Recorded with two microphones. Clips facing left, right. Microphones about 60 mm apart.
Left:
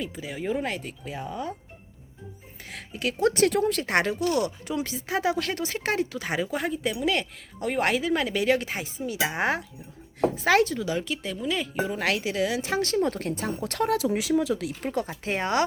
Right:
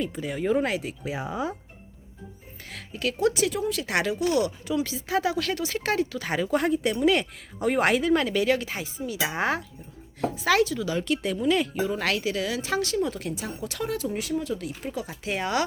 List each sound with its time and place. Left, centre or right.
0.0 s speech: centre
2.6 s speech: left
3.2 s speech: left
3.8 s speech: left
4.1 s speech: right
4.4 s speech: left
6.5 s speech: centre
8.4 s speech: left
11.0 s speech: centre
11.9 s speech: centre
12.8 s speech: left
14.0 s speech: left
15.2 s speech: left